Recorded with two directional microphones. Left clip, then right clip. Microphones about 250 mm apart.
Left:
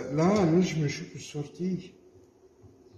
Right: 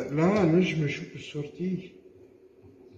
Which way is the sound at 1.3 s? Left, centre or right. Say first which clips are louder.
Right 2 dB; centre.